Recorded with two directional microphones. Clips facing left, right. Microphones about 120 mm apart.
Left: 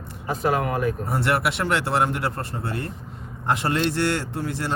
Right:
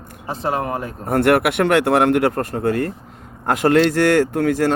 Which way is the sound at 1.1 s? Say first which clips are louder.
Right 13 dB; 55° right (ahead or behind).